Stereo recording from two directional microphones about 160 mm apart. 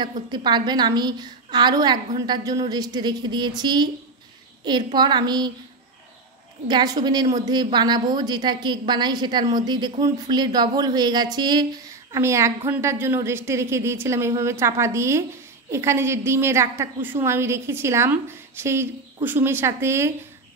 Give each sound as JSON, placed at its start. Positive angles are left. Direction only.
{"t": 0.3, "sound": "a woman's voice", "side_deg": -30}
{"t": 6.7, "sound": "a woman's voice", "side_deg": -25}